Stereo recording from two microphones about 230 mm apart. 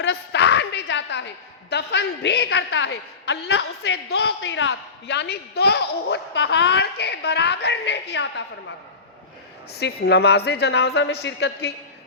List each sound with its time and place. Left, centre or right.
0.0 s a sound: left
1.7 s a woman's voice: left
9.7 s a woman's voice: left